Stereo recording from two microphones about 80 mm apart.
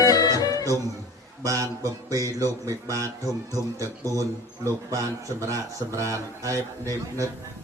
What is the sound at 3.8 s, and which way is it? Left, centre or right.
A man's voice, right.